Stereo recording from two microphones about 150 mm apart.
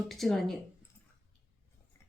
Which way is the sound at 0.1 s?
Centre (ahead or behind).